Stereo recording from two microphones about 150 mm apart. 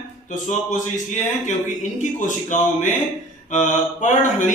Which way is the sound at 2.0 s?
55° left (ahead or behind).